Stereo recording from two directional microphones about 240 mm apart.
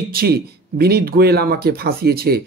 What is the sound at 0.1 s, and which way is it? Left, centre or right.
Speech, right.